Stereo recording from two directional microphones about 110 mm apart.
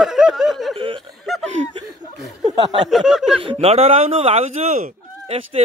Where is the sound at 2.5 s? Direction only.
45° right (ahead or behind).